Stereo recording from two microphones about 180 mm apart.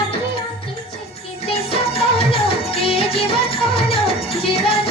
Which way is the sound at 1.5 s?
35° left (ahead or behind).